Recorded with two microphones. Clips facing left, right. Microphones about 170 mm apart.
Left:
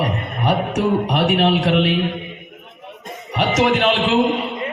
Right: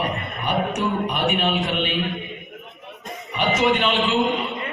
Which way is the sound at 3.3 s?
85° left.